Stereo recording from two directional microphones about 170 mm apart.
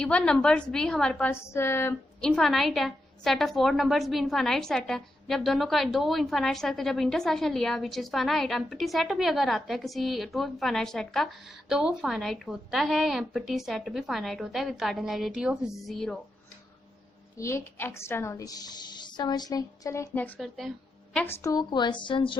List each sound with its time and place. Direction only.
0.0 s a woman's voice: 5° left (ahead or behind)
17.3 s a woman's voice: 15° left (ahead or behind)
20.4 s a woman's voice: centre (ahead or behind)
21.2 s a woman's voice: 15° left (ahead or behind)